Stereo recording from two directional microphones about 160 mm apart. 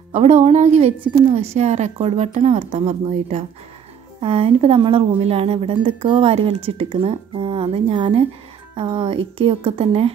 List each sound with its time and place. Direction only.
0.1 s a woman's voice: 50° right (ahead or behind)
4.2 s a woman's voice: 35° right (ahead or behind)